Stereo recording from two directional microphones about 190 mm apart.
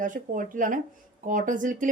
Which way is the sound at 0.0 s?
45° right (ahead or behind).